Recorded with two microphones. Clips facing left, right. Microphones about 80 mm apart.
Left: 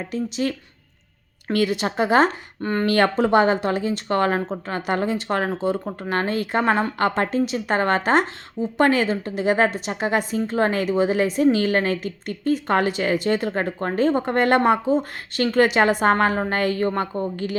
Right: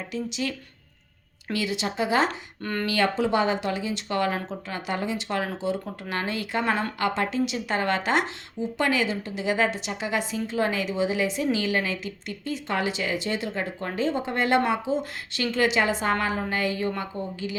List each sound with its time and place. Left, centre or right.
0.1 s a woman's voice: left
1.5 s speech: left
2.6 s speech: left
2.8 s a woman's voice: left